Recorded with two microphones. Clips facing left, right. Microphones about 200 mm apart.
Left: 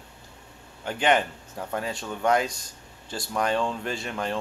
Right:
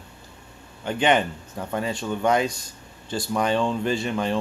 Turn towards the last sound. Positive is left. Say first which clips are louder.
# right 6 dB
turn(degrees=0)  # may be behind; listen again after turning